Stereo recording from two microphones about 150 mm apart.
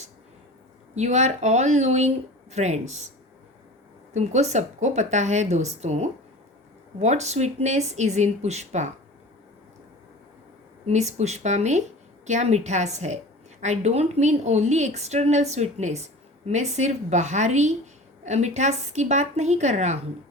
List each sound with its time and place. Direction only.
0.9 s a woman's voice: 50° right (ahead or behind)
4.1 s a woman's voice: 50° right (ahead or behind)
10.8 s a woman's voice: 50° right (ahead or behind)